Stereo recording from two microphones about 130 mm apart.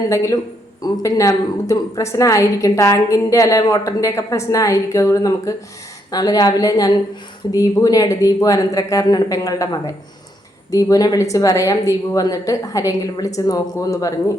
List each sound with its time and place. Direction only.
0.1 s a woman's voice: 25° left (ahead or behind)